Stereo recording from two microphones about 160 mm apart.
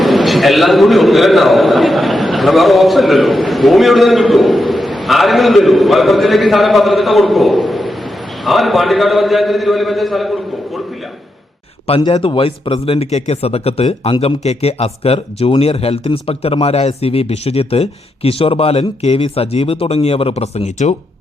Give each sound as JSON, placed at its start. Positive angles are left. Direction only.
{"t": 0.0, "sound": "a man's voice", "side_deg": 0}
{"t": 11.9, "sound": "speech", "side_deg": 35}